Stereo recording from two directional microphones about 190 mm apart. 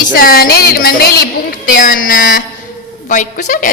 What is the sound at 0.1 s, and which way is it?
A woman's voice, 50° left (ahead or behind).